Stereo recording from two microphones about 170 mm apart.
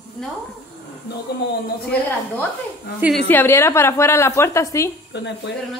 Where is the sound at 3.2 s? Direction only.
10° left (ahead or behind).